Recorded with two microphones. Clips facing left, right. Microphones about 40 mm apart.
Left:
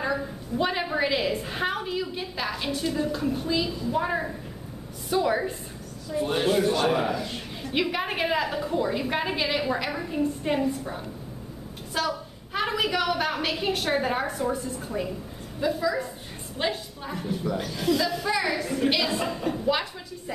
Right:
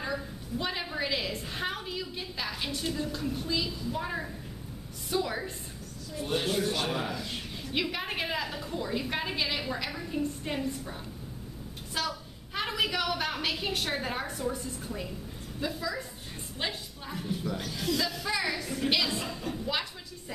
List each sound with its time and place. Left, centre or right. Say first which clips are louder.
0.0 s a woman's voice: left 6 dB; centre
7.2 s a woman's voice: left 4 dB; centre
11.9 s a woman's voice: left 6 dB; centre
14.9 s a woman's voice: left 7 dB; centre
19.2 s a woman's voice: left 8 dB; left
19.7 s a woman's voice: left 7 dB; centre